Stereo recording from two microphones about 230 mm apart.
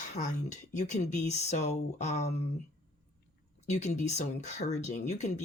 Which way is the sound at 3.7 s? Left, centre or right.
Left.